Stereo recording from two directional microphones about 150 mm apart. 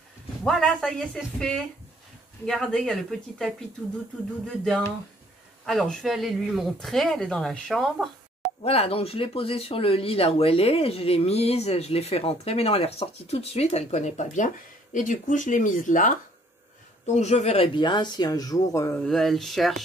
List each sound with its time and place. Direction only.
0.4 s speech: 5° left (ahead or behind)
5.7 s speech: centre (ahead or behind)
8.6 s speech: 40° left (ahead or behind); by 16.2 s 60° left (ahead or behind)
17.0 s speech: 50° left (ahead or behind)
17.7 s speech: 30° left (ahead or behind)
19.0 s speech: centre (ahead or behind)